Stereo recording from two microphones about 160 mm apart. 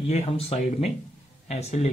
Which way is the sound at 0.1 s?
40° left (ahead or behind).